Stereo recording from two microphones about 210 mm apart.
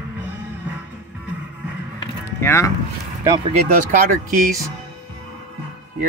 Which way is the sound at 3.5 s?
40° right (ahead or behind).